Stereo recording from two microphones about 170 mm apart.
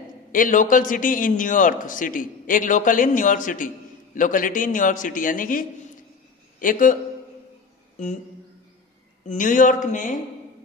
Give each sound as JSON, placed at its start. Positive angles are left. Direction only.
{"t": 0.3, "sound": "a man's voice", "side_deg": 50}
{"t": 9.3, "sound": "a man's voice", "side_deg": 50}